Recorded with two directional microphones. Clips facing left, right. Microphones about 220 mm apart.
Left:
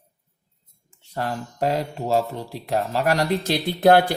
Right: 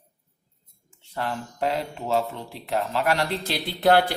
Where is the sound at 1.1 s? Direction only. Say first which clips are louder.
Left 2 dB; 40° left (ahead or behind).